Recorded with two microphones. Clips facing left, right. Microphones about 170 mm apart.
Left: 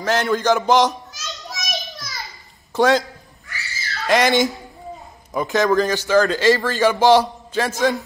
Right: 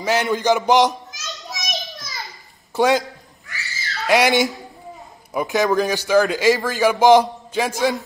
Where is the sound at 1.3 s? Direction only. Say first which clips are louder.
Right 1 dB; centre (ahead or behind).